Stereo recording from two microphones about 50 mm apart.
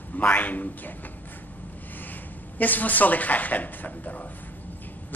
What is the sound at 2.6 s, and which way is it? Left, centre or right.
Speech, left.